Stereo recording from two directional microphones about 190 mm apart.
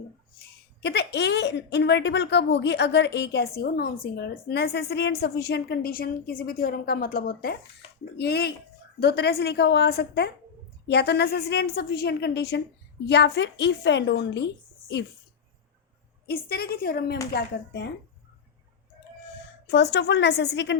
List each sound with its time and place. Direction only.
0.8 s a woman's voice: 60° left (ahead or behind)
16.2 s a woman's voice: 55° left (ahead or behind)
19.6 s a woman's voice: 65° left (ahead or behind)